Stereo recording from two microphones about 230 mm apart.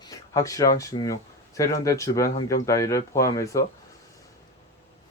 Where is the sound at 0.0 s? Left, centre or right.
Centre.